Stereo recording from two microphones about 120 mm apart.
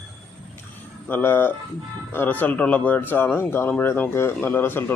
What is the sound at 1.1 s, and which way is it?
Speech, 15° left (ahead or behind).